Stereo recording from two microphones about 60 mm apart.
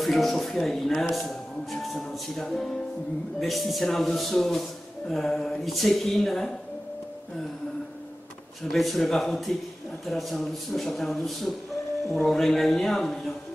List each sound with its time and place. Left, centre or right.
0.0 s speech: centre
8.6 s speech: centre